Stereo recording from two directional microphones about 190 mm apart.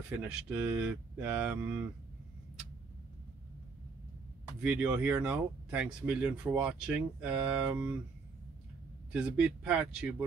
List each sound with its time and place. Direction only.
0.3 s speech: 10° right (ahead or behind)
4.6 s speech: 5° right (ahead or behind)
9.1 s speech: 5° right (ahead or behind)